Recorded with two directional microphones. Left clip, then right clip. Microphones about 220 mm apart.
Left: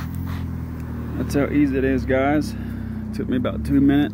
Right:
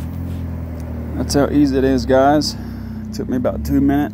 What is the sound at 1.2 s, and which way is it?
Speech, 10° right (ahead or behind).